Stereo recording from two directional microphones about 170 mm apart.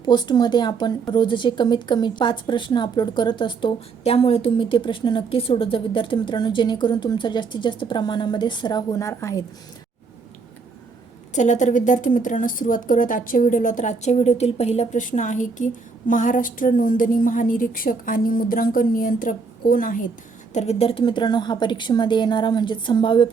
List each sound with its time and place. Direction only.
0.0 s a woman's voice: 25° left (ahead or behind)
11.3 s a woman's voice: 45° left (ahead or behind)
20.5 s a woman's voice: 40° left (ahead or behind)